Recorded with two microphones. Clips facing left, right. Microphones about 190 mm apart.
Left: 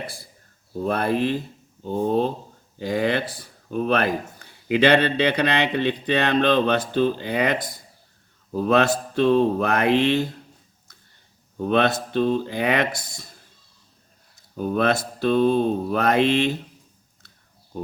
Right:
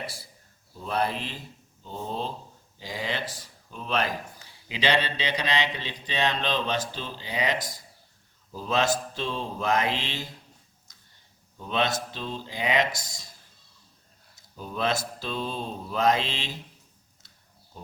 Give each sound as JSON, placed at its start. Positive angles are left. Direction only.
{"t": 0.8, "sound": "speech", "side_deg": 55}
{"t": 11.5, "sound": "speech", "side_deg": 60}
{"t": 14.3, "sound": "speech", "side_deg": 60}